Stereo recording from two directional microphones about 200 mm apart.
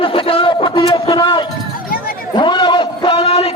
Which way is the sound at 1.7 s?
45° left (ahead or behind).